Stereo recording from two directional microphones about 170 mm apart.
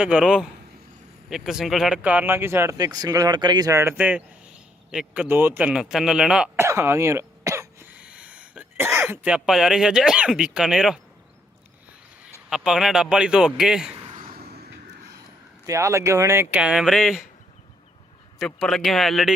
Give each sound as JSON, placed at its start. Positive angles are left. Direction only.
{"t": 0.0, "sound": "a man's voice", "side_deg": -5}
{"t": 6.7, "sound": "speech", "side_deg": -15}
{"t": 12.5, "sound": "a man's voice", "side_deg": -5}
{"t": 14.3, "sound": "a sound", "side_deg": -70}
{"t": 15.6, "sound": "speech", "side_deg": -20}
{"t": 18.3, "sound": "a man's voice", "side_deg": 0}